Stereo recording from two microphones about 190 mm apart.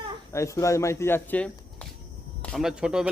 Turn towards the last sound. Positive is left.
turn(degrees=-5)  # may be behind; listen again after turning